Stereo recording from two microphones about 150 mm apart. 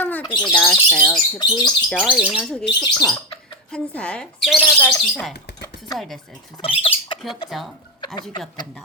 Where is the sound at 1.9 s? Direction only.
5° right (ahead or behind).